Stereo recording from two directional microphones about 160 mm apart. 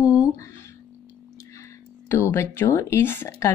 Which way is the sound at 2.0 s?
15° left (ahead or behind).